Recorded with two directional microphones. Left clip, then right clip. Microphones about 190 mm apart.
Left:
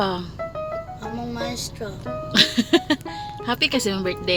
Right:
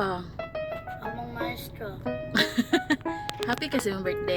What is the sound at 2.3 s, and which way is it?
Speech, 15° left (ahead or behind).